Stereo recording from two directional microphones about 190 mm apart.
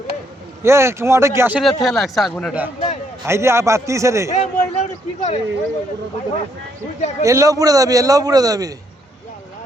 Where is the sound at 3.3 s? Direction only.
15° right (ahead or behind).